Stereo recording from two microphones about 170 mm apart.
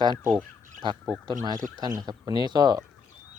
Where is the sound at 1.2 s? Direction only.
25° right (ahead or behind).